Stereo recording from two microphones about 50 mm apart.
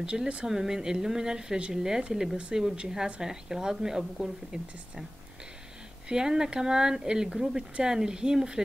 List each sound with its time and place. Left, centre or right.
0.0 s speech: centre
6.0 s speech: centre